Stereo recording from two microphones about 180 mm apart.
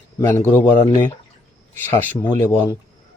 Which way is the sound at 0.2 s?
15° left (ahead or behind).